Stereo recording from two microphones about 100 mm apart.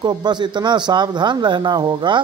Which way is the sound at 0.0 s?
45° right (ahead or behind).